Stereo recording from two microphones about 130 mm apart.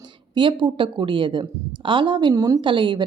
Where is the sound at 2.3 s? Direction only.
25° right (ahead or behind).